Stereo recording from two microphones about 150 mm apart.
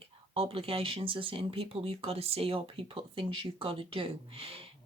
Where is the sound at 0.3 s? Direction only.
40° right (ahead or behind).